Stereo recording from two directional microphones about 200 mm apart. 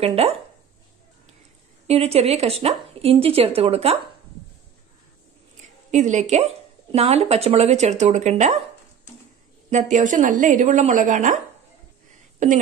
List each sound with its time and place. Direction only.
0.0 s speech: 30° right (ahead or behind)
1.9 s speech: 30° right (ahead or behind)
5.6 s a woman's voice: 35° right (ahead or behind)
9.7 s a woman's voice: 35° right (ahead or behind)
12.4 s a woman's voice: 40° right (ahead or behind)